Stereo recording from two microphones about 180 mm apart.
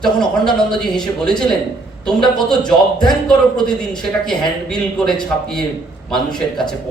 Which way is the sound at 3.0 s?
5° left (ahead or behind).